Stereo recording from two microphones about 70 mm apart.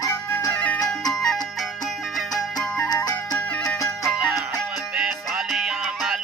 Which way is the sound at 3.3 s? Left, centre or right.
Left.